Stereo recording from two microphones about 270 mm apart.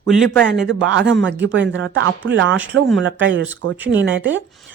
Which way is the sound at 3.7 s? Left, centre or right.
Centre.